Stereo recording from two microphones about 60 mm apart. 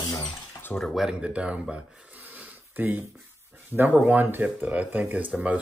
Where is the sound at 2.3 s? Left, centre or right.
Right.